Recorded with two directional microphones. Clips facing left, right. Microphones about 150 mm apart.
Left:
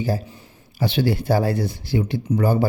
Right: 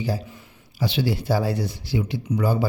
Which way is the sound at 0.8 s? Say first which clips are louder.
Left 3 dB; 55° left (ahead or behind).